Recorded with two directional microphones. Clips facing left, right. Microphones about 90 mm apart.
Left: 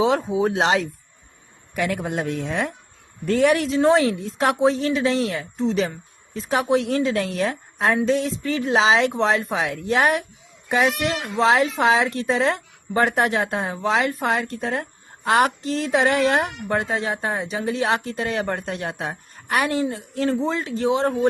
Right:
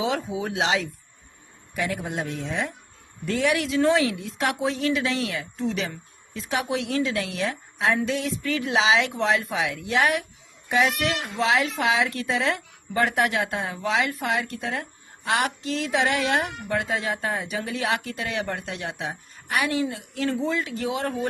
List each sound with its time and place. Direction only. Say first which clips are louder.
0.0 s a woman's voice: left 7 dB; 35° left (ahead or behind)
1.7 s speech: left 4 dB; 60° left (ahead or behind)
3.2 s a man's voice: left 5 dB; 45° left (ahead or behind); by 21.2 s 30° left (ahead or behind)